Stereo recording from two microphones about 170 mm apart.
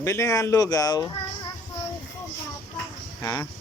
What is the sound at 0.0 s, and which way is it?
Speech, 15° left (ahead or behind).